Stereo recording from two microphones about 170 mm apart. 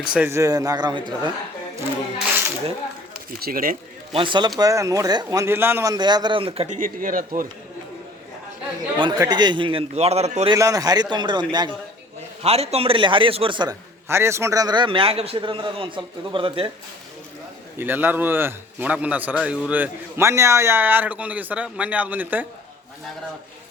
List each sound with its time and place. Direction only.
0.0 s a man's voice: 5° right (ahead or behind)
0.3 s a man's voice: 20° right (ahead or behind)
3.4 s speech: 55° right (ahead or behind)
4.1 s a man's voice: 30° right (ahead or behind)
6.7 s speech: 55° right (ahead or behind)
9.0 s a man's voice: 25° right (ahead or behind); by 10.5 s 40° right (ahead or behind)
10.5 s a man's voice: 20° right (ahead or behind)
12.4 s a man's voice: 35° right (ahead or behind)
14.1 s a man's voice: 15° right (ahead or behind); by 16.7 s 30° right (ahead or behind)
17.7 s a man's voice: 10° right (ahead or behind)